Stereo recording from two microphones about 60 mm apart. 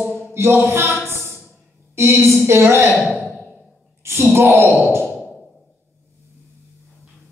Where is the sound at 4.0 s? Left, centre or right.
Right.